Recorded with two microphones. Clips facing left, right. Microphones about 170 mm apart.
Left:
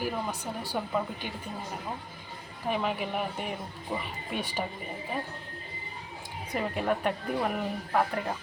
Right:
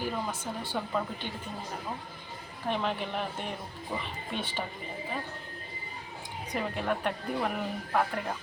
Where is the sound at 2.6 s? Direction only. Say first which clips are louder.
Left 1 dB; 5° left (ahead or behind).